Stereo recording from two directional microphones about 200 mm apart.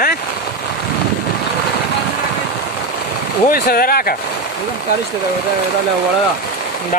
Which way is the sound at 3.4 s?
50° left (ahead or behind).